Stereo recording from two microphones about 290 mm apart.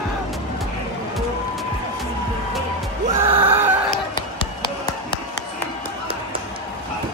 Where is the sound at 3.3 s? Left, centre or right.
Centre.